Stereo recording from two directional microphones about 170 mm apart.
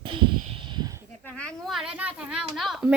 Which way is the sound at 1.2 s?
5° left (ahead or behind).